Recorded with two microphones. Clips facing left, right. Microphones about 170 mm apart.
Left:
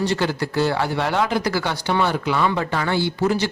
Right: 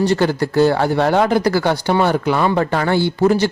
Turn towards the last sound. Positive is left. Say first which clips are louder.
# right 6 dB
turn(degrees=-50)  # may be behind; listen again after turning